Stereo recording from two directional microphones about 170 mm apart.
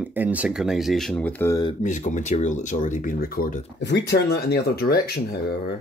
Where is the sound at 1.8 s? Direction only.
45° left (ahead or behind).